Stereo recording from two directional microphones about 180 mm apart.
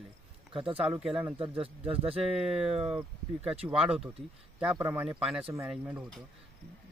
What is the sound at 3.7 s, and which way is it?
A man's voice, 5° right (ahead or behind).